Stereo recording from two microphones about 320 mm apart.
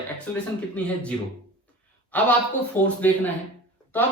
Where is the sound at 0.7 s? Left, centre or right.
Centre.